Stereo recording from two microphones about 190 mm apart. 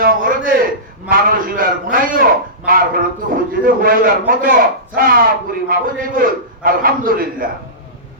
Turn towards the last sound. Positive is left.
turn(degrees=-50)  # may be behind; listen again after turning